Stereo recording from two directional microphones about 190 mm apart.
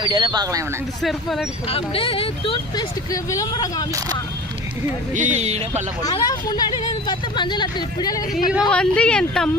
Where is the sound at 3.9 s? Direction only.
15° right (ahead or behind).